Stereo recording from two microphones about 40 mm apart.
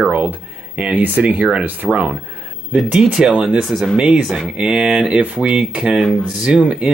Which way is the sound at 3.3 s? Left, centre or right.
Right.